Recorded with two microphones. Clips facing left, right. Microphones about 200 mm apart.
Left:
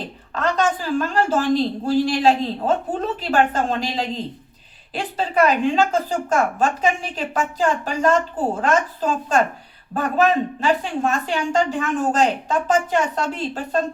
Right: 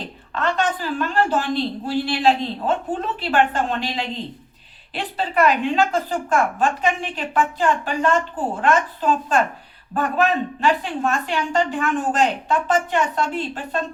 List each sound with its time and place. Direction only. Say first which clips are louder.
0.3 s a woman's voice: left 2 dB; 40° left (ahead or behind)